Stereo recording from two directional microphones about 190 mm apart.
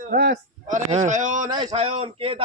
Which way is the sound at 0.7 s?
40° right (ahead or behind).